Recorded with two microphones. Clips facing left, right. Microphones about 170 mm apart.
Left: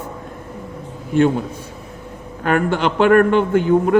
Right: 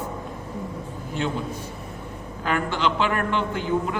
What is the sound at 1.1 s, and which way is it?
Speech, 55° left (ahead or behind).